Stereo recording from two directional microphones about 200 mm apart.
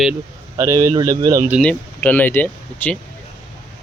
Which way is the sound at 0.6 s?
15° right (ahead or behind).